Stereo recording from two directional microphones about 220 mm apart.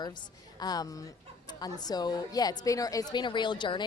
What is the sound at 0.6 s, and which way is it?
A woman's voice, 15° left (ahead or behind).